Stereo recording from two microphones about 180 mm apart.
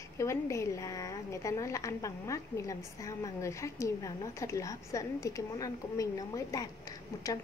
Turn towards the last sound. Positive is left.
turn(degrees=20)  # may be behind; listen again after turning